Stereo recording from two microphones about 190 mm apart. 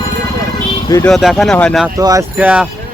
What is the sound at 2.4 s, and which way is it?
Speech, 5° right (ahead or behind).